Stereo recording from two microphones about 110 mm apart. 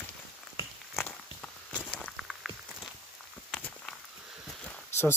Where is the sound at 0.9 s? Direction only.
15° left (ahead or behind).